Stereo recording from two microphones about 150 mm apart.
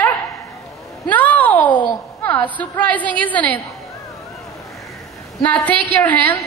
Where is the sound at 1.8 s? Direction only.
20° left (ahead or behind).